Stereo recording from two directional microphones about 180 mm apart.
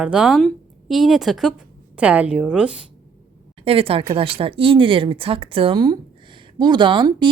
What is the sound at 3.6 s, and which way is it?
A woman's voice, 30° right (ahead or behind).